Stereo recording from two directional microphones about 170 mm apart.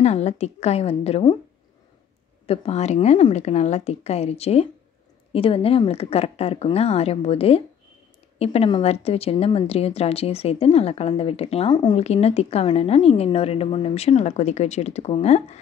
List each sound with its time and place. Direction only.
0.0 s a woman's voice: 40° left (ahead or behind)
2.4 s a woman's voice: 35° left (ahead or behind)